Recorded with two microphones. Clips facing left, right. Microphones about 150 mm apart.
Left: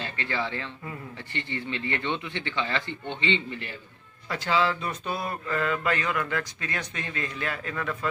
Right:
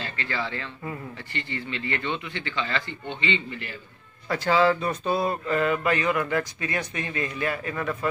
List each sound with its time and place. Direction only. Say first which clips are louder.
0.0 s a man's voice: even; 20° left (ahead or behind)
4.3 s speech: right 5 dB; 45° right (ahead or behind); by 8.1 s 10° right (ahead or behind)